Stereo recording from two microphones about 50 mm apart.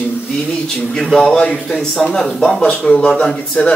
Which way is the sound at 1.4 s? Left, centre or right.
Left.